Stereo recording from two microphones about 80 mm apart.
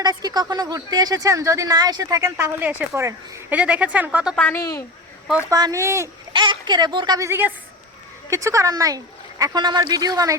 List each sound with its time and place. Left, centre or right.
0.0 s speech: right
2.3 s speech: right
2.9 s speech: right
3.5 s speech: centre
4.6 s a woman's voice: left
5.5 s speech: right
5.7 s speech: right
6.3 s a woman's voice: right
7.2 s speech: right
8.3 s speech: right